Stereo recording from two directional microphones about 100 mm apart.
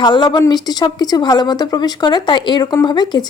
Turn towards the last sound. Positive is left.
turn(degrees=45)  # may be behind; listen again after turning